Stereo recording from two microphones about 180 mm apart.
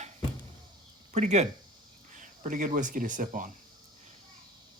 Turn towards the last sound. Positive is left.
turn(degrees=-45)  # may be behind; listen again after turning